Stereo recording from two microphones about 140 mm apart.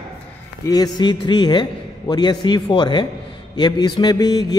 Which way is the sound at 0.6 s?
25° left (ahead or behind).